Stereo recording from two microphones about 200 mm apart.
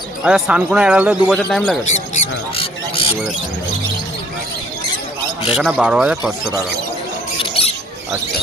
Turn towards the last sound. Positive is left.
turn(degrees=30)  # may be behind; listen again after turning